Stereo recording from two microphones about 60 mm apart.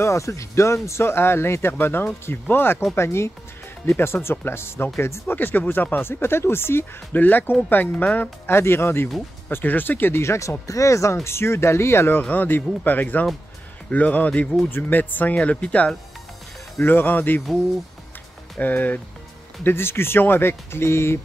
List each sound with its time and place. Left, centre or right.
0.0 s speech: left
5.3 s speech: left
8.5 s speech: left
10.2 s speech: left
11.2 s speech: left
12.2 s speech: left
16.8 s speech: left
18.6 s speech: left
19.6 s speech: left